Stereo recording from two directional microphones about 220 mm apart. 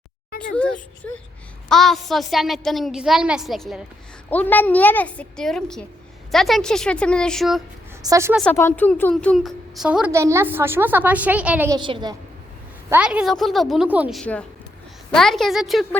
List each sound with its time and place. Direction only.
0.5 s a woman's voice: 5° left (ahead or behind)
8.0 s a woman's voice: 15° right (ahead or behind)
8.5 s a woman's voice: 10° left (ahead or behind); by 11.8 s 10° right (ahead or behind)
11.8 s a woman's voice: 20° right (ahead or behind)
12.9 s a woman's voice: 5° right (ahead or behind)